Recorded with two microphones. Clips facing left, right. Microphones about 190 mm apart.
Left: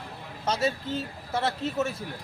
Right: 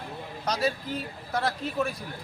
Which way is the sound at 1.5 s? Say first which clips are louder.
Left 1 dB; 25° left (ahead or behind).